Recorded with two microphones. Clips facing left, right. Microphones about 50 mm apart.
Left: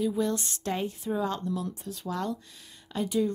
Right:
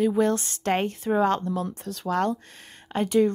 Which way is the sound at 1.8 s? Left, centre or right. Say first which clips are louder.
Right 10 dB; right.